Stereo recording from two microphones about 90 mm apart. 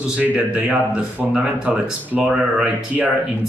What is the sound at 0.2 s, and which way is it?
Speech, 20° right (ahead or behind).